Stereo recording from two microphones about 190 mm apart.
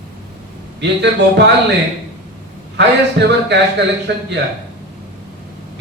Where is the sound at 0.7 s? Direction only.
65° right (ahead or behind).